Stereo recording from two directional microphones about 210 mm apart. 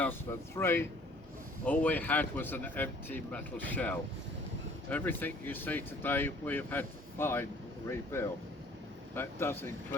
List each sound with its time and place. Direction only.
0.0 s speech: 10° left (ahead or behind)